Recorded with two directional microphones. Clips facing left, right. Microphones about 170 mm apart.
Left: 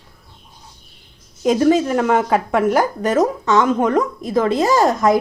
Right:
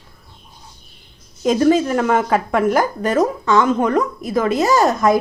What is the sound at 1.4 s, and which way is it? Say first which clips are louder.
Speech: even; 15° left (ahead or behind).